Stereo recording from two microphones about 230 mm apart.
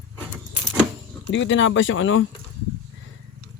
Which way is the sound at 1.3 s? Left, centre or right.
Left.